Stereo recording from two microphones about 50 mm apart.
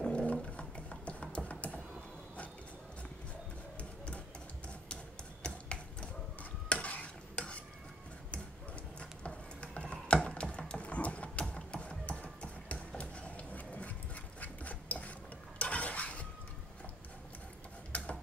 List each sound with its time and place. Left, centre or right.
0.3 s music: left
3.7 s printer: left
5.4 s a sound: centre
6.7 s stir: left
9.2 s stir: left
10.7 s horse: left
11.4 s a sound: centre
15.6 s dishes: left
17.9 s a sound: left